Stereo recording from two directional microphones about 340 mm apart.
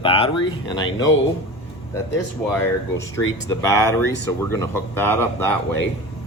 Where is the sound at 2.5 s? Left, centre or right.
Centre.